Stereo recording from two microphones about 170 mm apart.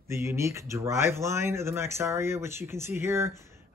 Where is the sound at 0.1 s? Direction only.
15° right (ahead or behind).